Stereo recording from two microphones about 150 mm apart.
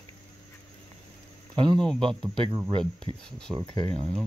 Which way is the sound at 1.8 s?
5° left (ahead or behind).